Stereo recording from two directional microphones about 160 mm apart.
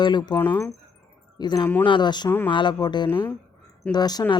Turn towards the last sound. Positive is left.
turn(degrees=25)  # may be behind; listen again after turning